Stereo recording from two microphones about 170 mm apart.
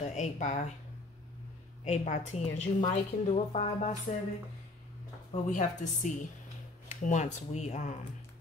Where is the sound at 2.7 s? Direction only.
30° left (ahead or behind).